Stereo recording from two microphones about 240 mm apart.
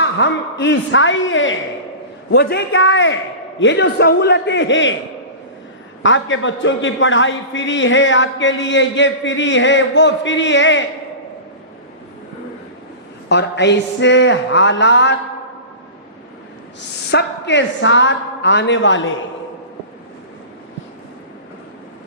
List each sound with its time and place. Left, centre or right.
0.0 s a man's voice: left
2.3 s a man's voice: left
6.0 s a man's voice: left
13.2 s a man's voice: left
17.1 s a man's voice: left